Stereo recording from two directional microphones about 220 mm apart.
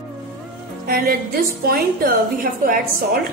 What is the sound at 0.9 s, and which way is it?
A woman's voice, 40° right (ahead or behind).